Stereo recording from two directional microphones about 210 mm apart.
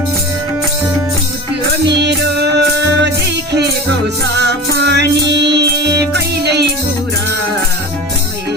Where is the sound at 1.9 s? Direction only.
55° right (ahead or behind).